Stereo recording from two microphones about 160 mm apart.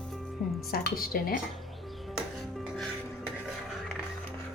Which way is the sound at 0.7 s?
65° left (ahead or behind).